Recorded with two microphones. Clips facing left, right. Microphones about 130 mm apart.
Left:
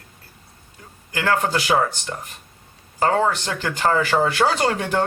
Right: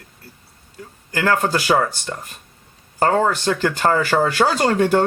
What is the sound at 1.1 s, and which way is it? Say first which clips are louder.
Speech: right 2 dB; 40° right (ahead or behind).